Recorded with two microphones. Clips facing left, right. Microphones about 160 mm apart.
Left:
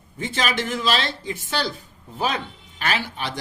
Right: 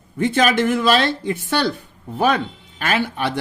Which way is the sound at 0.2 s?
55° right (ahead or behind).